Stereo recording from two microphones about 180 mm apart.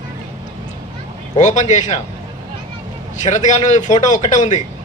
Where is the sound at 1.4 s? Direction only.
40° left (ahead or behind).